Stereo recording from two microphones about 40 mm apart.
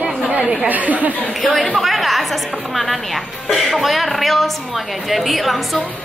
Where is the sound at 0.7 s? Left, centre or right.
Right.